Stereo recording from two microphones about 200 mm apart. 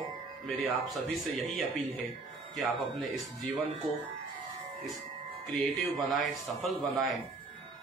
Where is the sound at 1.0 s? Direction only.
Centre (ahead or behind).